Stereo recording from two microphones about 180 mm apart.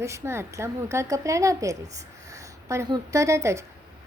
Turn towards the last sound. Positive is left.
turn(degrees=-15)  # may be behind; listen again after turning